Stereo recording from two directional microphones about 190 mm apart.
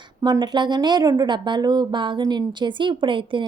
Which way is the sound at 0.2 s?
20° right (ahead or behind).